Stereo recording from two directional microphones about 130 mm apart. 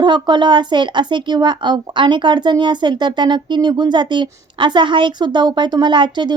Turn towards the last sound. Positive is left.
turn(degrees=-35)  # may be behind; listen again after turning